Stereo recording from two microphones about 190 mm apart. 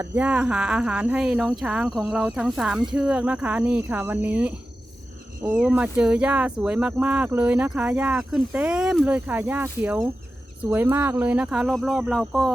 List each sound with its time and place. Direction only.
0.2 s speech: 5° right (ahead or behind)